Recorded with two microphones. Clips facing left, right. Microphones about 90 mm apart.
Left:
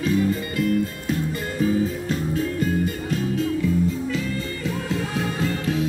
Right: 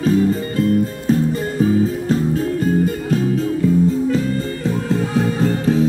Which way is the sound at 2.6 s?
40° right (ahead or behind).